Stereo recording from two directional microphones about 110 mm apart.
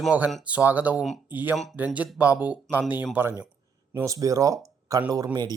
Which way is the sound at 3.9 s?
30° right (ahead or behind).